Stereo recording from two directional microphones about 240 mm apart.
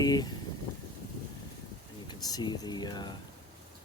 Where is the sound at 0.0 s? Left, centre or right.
Centre.